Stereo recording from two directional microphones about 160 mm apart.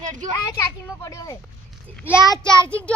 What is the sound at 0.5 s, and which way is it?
Speech, 20° left (ahead or behind).